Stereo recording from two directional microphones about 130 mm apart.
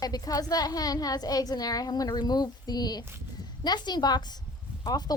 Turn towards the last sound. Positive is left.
turn(degrees=30)  # may be behind; listen again after turning